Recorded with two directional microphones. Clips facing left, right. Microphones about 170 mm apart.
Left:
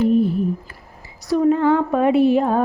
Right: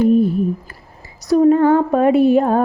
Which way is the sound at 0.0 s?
45° right (ahead or behind).